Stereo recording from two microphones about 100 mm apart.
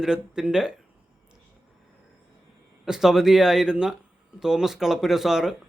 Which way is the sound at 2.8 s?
5° right (ahead or behind).